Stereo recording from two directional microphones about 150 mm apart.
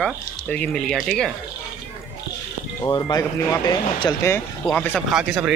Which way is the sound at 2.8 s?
20° left (ahead or behind).